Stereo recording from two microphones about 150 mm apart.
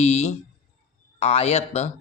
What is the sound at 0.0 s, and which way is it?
A man's voice, 50° left (ahead or behind).